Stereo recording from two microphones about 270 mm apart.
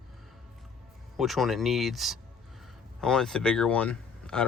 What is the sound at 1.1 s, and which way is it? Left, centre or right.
Speech, centre.